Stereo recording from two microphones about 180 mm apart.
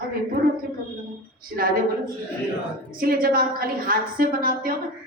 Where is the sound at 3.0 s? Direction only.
55° right (ahead or behind).